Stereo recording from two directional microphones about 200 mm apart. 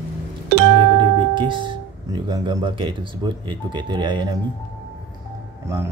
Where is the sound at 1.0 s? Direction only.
25° right (ahead or behind).